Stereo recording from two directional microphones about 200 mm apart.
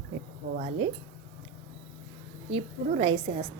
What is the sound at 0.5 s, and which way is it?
Speech, 35° right (ahead or behind).